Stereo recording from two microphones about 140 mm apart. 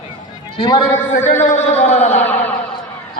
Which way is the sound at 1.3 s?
60° left (ahead or behind).